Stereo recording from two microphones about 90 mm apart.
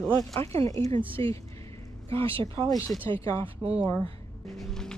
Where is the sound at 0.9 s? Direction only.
80° right.